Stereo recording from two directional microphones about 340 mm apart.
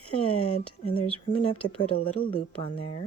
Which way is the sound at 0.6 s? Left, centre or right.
Centre.